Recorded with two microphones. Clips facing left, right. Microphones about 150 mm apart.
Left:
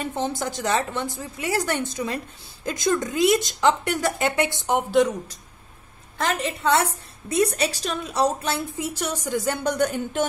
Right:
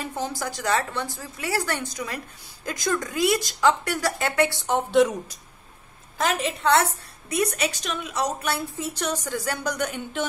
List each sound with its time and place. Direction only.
0.0 s a woman's voice: 25° left (ahead or behind)
6.1 s a woman's voice: centre (ahead or behind)
6.6 s a woman's voice: 10° left (ahead or behind)
7.2 s a woman's voice: 25° left (ahead or behind)
8.7 s a woman's voice: 10° left (ahead or behind); by 10.2 s 35° left (ahead or behind)